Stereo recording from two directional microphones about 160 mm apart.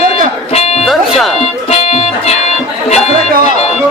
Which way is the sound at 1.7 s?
35° left (ahead or behind).